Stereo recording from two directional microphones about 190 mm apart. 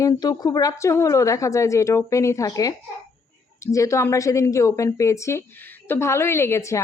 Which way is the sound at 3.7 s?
15° left (ahead or behind).